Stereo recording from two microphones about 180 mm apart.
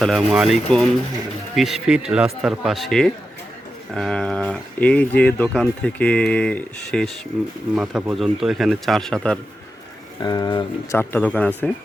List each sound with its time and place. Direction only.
0.0 s speech: centre (ahead or behind)
10.2 s speech: 20° left (ahead or behind)
10.9 s speech: 10° left (ahead or behind)